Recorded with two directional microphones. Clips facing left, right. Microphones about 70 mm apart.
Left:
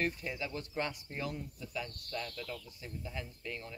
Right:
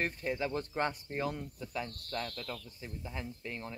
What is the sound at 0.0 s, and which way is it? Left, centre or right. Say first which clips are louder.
Speech: right 2 dB; right.